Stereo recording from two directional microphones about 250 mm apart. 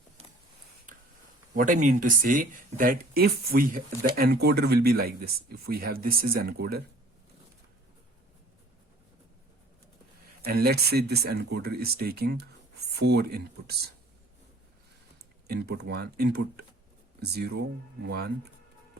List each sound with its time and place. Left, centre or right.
1.5 s speech: right
10.4 s speech: right
15.4 s speech: right